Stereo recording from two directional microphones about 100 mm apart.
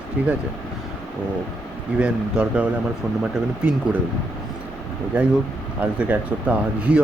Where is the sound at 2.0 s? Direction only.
15° right (ahead or behind).